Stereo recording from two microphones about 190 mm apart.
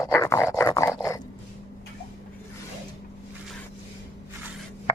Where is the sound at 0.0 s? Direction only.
15° left (ahead or behind).